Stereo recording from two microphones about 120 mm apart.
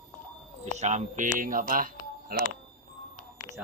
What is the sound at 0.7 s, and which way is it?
Speech, 85° right.